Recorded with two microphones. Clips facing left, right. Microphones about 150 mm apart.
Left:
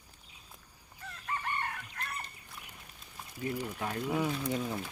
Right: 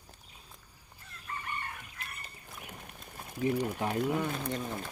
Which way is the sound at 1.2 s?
90° left.